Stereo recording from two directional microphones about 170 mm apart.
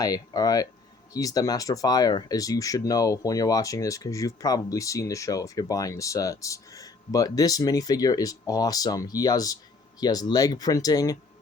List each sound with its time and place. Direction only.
0.0 s speech: 20° left (ahead or behind)